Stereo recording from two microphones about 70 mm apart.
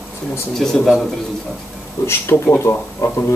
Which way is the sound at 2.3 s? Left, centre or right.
Left.